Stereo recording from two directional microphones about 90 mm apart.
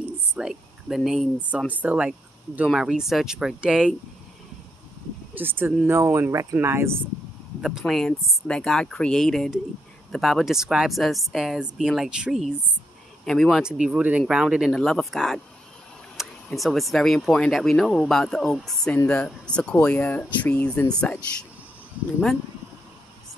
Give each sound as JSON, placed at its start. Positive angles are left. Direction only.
{"t": 0.4, "sound": "speech", "side_deg": -5}
{"t": 1.7, "sound": "speech", "side_deg": -15}
{"t": 5.3, "sound": "speech", "side_deg": -25}
{"t": 7.8, "sound": "speech", "side_deg": 0}
{"t": 13.6, "sound": "speech", "side_deg": -10}
{"t": 16.4, "sound": "speech", "side_deg": 0}